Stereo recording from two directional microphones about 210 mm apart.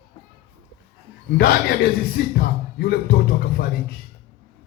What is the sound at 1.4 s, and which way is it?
Speech, 45° left (ahead or behind).